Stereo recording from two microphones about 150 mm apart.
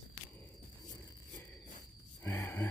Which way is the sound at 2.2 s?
15° left (ahead or behind).